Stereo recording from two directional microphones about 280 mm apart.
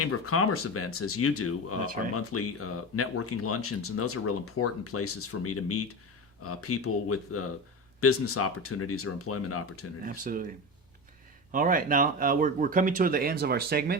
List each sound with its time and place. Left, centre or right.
0.0 s speech: left
10.1 s speech: right
11.5 s speech: right